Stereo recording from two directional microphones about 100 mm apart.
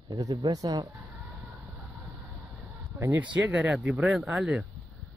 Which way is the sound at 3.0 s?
20° right (ahead or behind).